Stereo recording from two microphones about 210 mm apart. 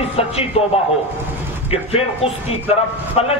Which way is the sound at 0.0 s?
30° left (ahead or behind).